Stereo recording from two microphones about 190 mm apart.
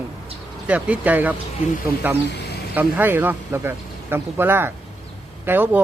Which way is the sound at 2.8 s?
10° right (ahead or behind).